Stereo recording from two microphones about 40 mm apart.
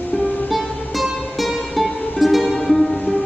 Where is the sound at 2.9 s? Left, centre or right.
Left.